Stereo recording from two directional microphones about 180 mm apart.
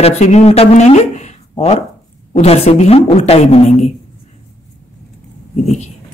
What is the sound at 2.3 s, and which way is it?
Speech, 35° left (ahead or behind).